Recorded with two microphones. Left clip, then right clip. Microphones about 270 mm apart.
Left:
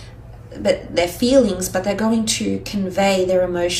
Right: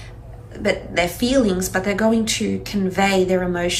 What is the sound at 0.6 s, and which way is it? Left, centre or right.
A woman's voice, centre.